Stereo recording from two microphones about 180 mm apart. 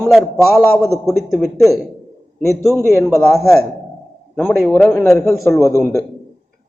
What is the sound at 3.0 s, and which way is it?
Speech, 15° left (ahead or behind).